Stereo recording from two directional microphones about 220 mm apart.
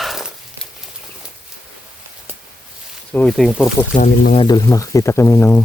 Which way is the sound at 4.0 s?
30° left (ahead or behind).